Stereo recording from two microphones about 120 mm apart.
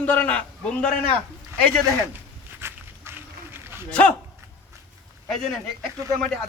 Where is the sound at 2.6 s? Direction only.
20° right (ahead or behind).